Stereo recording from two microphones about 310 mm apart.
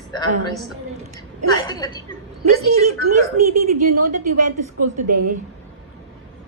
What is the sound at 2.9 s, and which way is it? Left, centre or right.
A woman's voice, right.